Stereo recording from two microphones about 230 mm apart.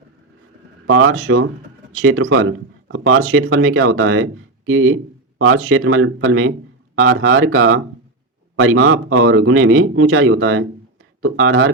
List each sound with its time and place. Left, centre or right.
0.9 s speech: right